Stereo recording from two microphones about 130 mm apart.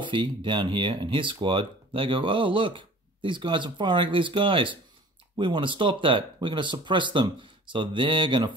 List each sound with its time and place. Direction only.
0.0 s speech: 40° right (ahead or behind)